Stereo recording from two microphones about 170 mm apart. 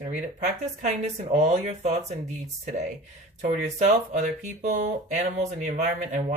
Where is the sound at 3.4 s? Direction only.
45° right (ahead or behind).